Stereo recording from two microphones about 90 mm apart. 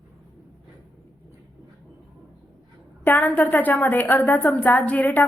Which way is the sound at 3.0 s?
20° left (ahead or behind).